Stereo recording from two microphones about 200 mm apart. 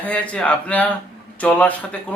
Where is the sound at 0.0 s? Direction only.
5° left (ahead or behind).